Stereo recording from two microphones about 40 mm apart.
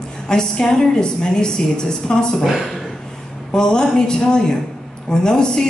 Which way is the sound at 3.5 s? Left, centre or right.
Centre.